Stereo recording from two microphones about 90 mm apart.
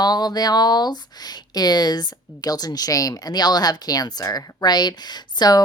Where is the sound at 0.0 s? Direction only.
50° left (ahead or behind).